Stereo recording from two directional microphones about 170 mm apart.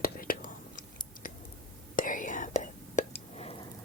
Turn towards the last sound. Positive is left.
turn(degrees=45)  # may be behind; listen again after turning